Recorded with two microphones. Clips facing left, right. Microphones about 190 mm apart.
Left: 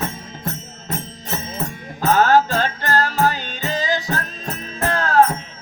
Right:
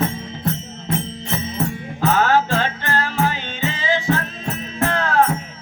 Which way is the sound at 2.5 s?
40° left (ahead or behind).